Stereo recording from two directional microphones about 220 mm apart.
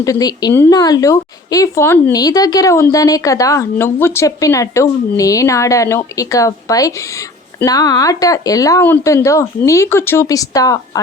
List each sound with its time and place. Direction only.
0.0 s speech: 15° left (ahead or behind)